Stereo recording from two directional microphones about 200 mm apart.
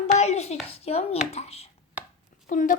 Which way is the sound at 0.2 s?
35° left (ahead or behind).